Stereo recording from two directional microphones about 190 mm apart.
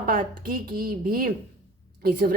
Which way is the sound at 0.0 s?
50° right (ahead or behind).